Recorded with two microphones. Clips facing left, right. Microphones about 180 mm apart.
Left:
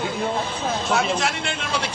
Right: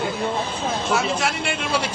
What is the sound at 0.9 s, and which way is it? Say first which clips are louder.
Speech: left 1 dB; 5° right (ahead or behind).